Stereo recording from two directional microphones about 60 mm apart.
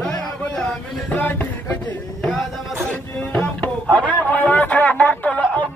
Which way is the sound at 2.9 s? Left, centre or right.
Left.